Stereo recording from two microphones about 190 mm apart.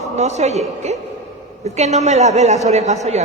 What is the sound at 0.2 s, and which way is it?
A man's voice, 35° right (ahead or behind).